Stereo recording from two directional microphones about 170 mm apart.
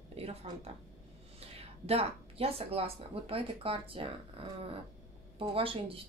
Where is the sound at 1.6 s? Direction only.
35° right (ahead or behind).